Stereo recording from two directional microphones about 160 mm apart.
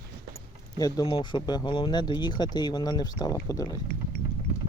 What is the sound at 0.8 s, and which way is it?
Speech, 25° left (ahead or behind).